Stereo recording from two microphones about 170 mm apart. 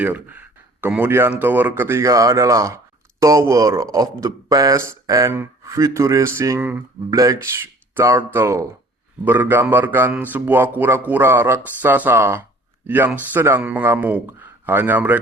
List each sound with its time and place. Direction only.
0.0 s speech: 10° right (ahead or behind)